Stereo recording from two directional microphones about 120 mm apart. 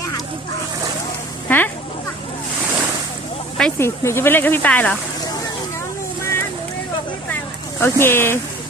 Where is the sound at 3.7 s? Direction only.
20° left (ahead or behind).